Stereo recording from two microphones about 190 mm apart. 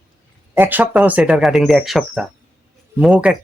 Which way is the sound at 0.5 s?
10° right (ahead or behind).